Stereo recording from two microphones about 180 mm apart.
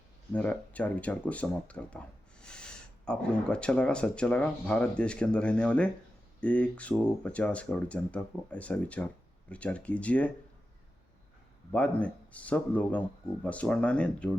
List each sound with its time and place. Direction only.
0.3 s speech: 10° left (ahead or behind)
11.7 s speech: 5° left (ahead or behind)